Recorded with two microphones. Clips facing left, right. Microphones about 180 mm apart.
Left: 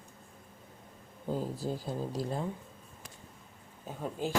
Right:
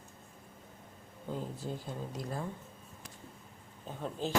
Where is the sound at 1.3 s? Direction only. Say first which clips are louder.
Left 5 dB; 35° left (ahead or behind).